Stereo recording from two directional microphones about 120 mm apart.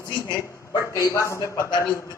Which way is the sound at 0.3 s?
20° left (ahead or behind).